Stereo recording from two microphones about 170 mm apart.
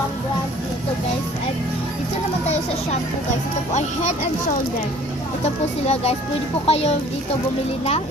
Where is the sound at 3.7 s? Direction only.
45° left (ahead or behind).